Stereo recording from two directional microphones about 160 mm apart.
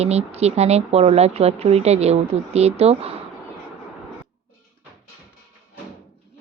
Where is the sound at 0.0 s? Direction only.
40° right (ahead or behind).